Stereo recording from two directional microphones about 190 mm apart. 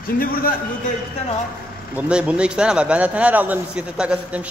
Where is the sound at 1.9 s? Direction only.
5° right (ahead or behind).